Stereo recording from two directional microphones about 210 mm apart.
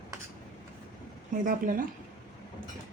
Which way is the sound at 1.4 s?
40° right (ahead or behind).